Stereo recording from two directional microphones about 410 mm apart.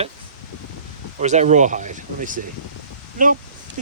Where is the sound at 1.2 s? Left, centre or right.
Centre.